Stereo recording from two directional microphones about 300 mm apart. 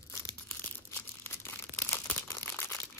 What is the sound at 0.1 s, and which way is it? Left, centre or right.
Crumpling, centre.